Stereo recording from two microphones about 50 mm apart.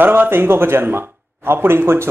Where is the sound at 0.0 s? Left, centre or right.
Right.